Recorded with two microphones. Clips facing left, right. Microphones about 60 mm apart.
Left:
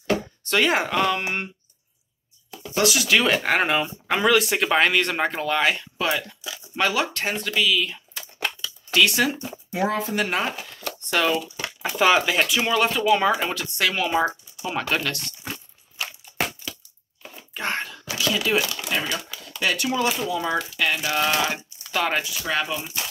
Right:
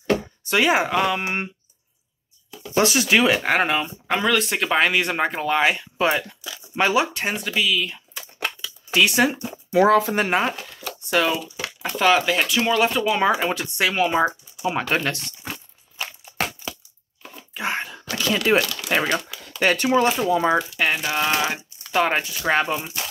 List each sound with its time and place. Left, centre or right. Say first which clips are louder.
0.4 s speech: right 2 dB; centre
2.7 s speech: right 2 dB; right
3.2 s speech: right 2 dB; centre
8.4 s crumpling: even; centre
9.8 s speech: right 8 dB; right
10.5 s speech: even; centre; by 15.3 s right
17.6 s a sound: right 1 dB; centre
18.2 s speech: right 3 dB; right
18.9 s speech: right 5 dB; right
20.9 s speech: left 1 dB; centre
22.4 s speech: right 5 dB; right